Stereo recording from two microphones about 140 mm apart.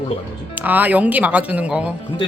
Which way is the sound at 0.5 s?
10° right (ahead or behind).